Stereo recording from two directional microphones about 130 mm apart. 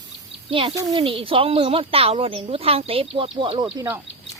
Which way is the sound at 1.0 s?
45° right (ahead or behind).